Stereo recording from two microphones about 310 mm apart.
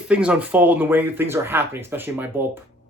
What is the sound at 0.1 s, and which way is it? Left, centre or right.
Speech, centre.